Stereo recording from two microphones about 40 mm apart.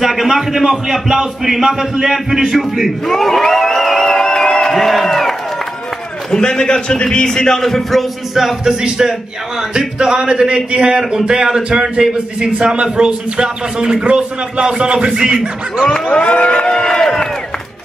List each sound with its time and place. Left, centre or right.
0.0 s a man's voice: centre
3.1 s a sound: centre
4.7 s crowd: centre
6.3 s a man's voice: left
8.4 s a man's voice: centre
8.8 s a man's voice: centre
15.1 s a man's voice: centre
15.9 s speech: left